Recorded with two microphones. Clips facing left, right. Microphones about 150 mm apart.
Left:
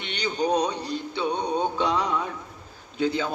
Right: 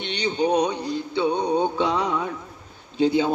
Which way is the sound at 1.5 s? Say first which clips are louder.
Right 3 dB; 20° right (ahead or behind).